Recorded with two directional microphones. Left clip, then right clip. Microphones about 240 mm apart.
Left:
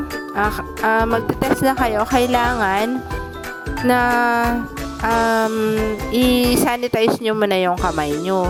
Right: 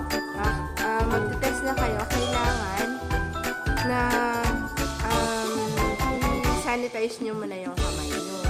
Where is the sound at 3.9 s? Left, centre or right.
Left.